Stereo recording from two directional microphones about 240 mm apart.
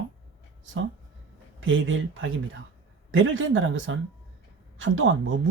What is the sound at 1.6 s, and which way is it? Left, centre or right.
Speech, right.